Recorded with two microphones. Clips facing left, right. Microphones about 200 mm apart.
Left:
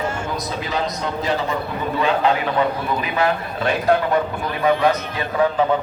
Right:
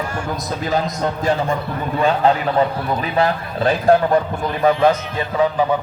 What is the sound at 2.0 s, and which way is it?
A man's voice, 40° right (ahead or behind).